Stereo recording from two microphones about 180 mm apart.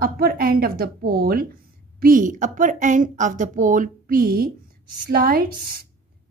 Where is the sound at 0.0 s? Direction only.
55° right (ahead or behind).